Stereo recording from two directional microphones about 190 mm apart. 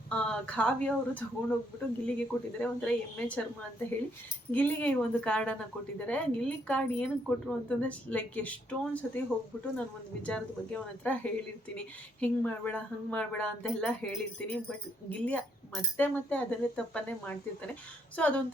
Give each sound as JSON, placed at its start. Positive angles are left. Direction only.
{"t": 0.1, "sound": "a woman's voice", "side_deg": 5}
{"t": 4.5, "sound": "a woman's voice", "side_deg": 5}
{"t": 10.2, "sound": "a woman's voice", "side_deg": 5}